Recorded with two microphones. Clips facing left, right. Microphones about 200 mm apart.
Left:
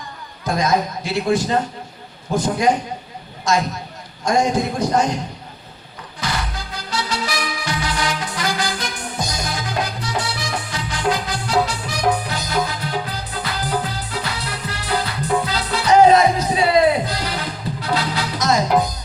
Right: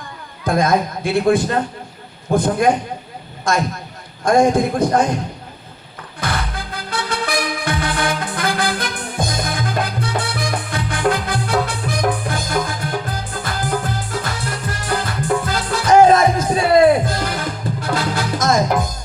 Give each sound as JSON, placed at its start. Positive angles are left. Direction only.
{"t": 0.4, "sound": "a man's voice", "side_deg": -55}
{"t": 6.1, "sound": "music", "side_deg": -55}